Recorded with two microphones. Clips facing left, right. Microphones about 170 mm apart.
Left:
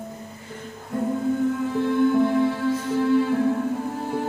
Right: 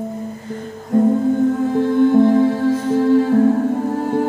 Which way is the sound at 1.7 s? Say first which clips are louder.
Right 6 dB; 35° right (ahead or behind).